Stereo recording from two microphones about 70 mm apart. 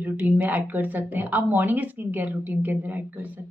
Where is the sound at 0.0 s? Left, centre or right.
Right.